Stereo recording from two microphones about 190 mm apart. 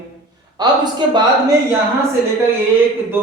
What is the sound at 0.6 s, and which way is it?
Speech, 20° right (ahead or behind).